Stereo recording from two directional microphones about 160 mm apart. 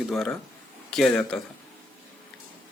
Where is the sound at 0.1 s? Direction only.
Centre (ahead or behind).